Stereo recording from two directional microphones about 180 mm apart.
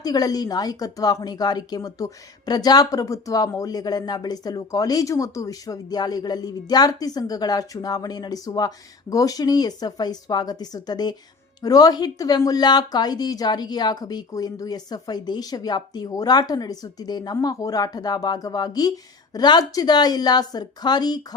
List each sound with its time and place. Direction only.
0.0 s speech: 20° left (ahead or behind)